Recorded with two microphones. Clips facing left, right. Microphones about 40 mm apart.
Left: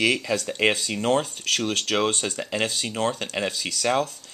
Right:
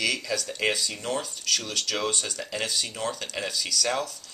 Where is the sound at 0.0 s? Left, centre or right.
Left.